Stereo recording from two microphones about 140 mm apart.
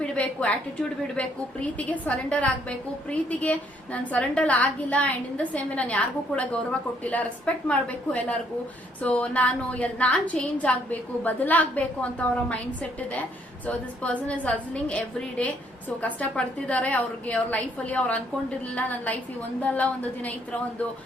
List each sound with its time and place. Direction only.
0.0 s a woman's voice: 10° left (ahead or behind)